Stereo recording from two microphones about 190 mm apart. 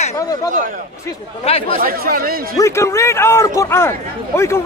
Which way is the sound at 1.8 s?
50° right (ahead or behind).